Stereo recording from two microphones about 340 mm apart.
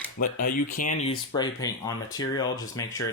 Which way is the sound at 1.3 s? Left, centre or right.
Centre.